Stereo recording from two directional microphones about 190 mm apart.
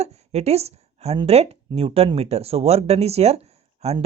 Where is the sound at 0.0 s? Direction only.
35° right (ahead or behind).